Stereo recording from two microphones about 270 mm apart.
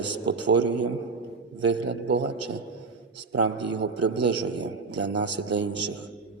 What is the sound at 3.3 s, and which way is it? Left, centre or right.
Speech, right.